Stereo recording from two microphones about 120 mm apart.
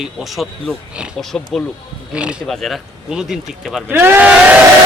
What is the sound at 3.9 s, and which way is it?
Speech, 15° right (ahead or behind).